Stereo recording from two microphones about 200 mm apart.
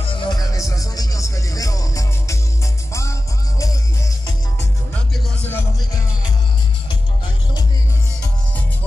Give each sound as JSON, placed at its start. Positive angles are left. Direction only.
{"t": 0.0, "sound": "music", "side_deg": 20}
{"t": 5.5, "sound": "music", "side_deg": 10}